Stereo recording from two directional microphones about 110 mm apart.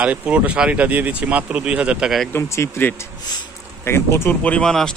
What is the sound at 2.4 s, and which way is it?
Speech, 20° left (ahead or behind).